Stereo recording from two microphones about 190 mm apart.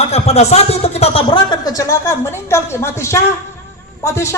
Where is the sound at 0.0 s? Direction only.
35° left (ahead or behind).